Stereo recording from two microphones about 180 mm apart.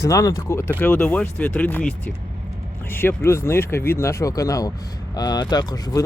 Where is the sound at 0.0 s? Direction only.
15° left (ahead or behind).